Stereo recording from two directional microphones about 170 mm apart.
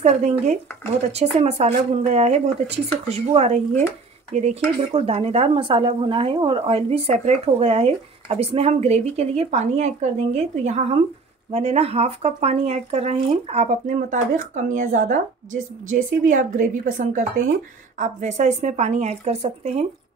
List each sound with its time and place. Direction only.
0.0 s speech: 45° right (ahead or behind)